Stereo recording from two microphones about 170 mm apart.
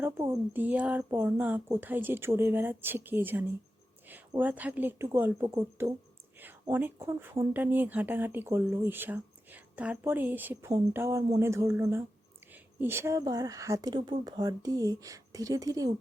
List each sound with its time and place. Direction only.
0.0 s speech: 15° right (ahead or behind)